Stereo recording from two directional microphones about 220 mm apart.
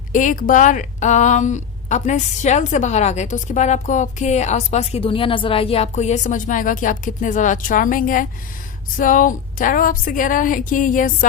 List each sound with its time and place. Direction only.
0.1 s a woman's voice: 35° left (ahead or behind)